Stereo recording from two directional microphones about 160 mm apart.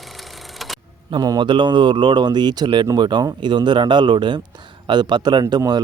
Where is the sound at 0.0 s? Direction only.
Centre (ahead or behind).